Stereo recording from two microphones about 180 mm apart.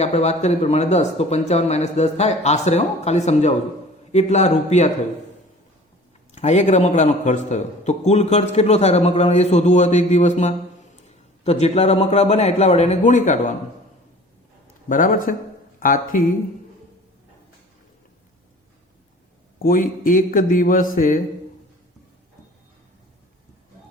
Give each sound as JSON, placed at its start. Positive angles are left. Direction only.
{"t": 0.0, "sound": "a man's voice", "side_deg": 35}
{"t": 6.3, "sound": "a man's voice", "side_deg": 40}
{"t": 14.8, "sound": "a man's voice", "side_deg": 50}
{"t": 19.5, "sound": "a man's voice", "side_deg": 50}